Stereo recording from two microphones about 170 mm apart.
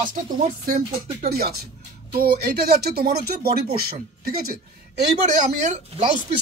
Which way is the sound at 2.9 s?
65° right (ahead or behind).